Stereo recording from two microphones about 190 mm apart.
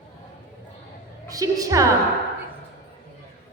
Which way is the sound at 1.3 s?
20° right (ahead or behind).